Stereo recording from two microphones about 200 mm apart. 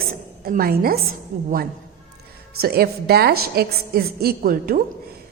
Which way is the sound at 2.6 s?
50° right (ahead or behind).